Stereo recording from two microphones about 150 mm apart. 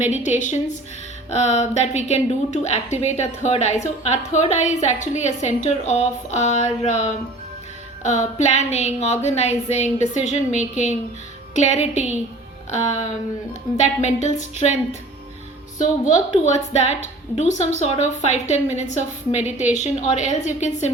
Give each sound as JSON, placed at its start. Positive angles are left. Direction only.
{"t": 0.0, "sound": "a woman's voice", "side_deg": 50}
{"t": 15.8, "sound": "a woman's voice", "side_deg": 55}